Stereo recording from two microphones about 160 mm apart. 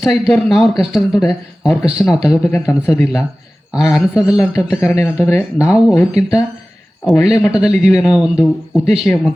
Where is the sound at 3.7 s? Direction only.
Centre (ahead or behind).